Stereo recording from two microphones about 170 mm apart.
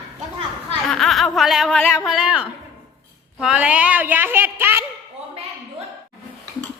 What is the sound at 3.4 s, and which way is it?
A woman's voice, 5° right (ahead or behind).